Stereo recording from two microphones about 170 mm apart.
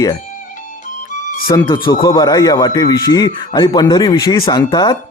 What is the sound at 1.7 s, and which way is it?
A man's voice, 25° left (ahead or behind).